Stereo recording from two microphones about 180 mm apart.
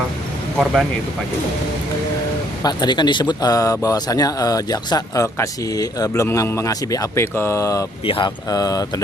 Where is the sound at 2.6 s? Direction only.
25° left (ahead or behind).